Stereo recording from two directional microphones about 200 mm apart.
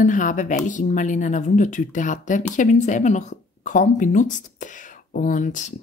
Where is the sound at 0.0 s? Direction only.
40° left (ahead or behind).